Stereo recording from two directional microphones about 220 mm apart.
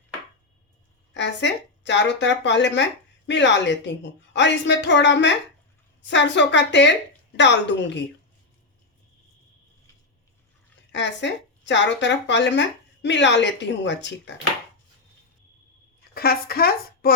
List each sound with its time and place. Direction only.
1.1 s speech: 55° left (ahead or behind)
10.9 s speech: 55° left (ahead or behind)
16.1 s speech: 45° left (ahead or behind)